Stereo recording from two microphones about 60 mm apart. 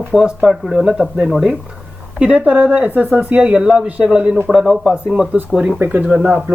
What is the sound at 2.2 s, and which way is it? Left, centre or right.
Speech, right.